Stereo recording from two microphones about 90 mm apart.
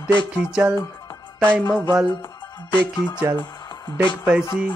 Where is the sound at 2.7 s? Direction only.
60° left (ahead or behind).